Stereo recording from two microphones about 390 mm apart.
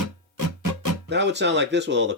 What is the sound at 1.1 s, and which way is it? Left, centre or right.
Speech, right.